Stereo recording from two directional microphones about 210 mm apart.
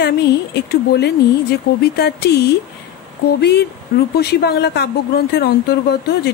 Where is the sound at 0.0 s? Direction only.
50° left (ahead or behind).